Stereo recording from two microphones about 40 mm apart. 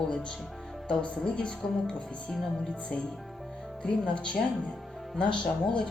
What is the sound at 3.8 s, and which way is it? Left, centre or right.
Speech, left.